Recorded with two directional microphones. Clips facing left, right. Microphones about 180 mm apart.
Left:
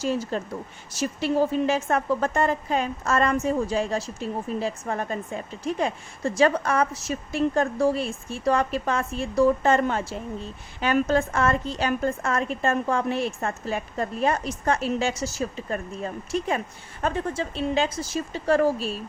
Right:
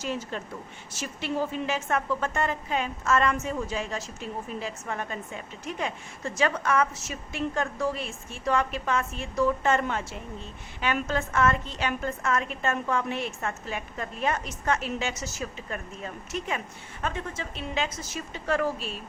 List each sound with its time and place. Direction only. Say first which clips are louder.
0.0 s a woman's voice: left 6 dB; 35° left (ahead or behind)